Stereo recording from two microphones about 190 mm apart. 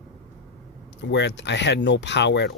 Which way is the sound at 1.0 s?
65° left (ahead or behind).